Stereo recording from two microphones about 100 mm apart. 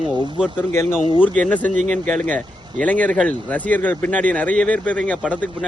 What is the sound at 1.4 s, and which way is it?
Speech, 15° left (ahead or behind).